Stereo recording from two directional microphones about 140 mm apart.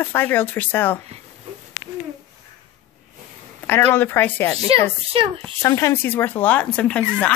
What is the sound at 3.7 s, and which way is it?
Speech, 15° left (ahead or behind).